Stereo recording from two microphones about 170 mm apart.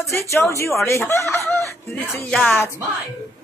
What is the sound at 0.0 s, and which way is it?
Speech, 15° left (ahead or behind).